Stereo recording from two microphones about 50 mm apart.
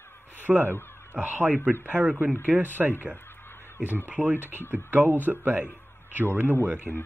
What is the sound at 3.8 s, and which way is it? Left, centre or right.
Speech, right.